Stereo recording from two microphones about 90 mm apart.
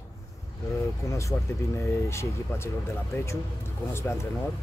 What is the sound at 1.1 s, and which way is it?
Speech, 35° left (ahead or behind).